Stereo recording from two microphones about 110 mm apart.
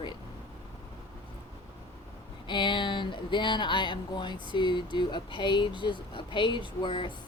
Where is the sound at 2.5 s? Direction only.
45° left (ahead or behind).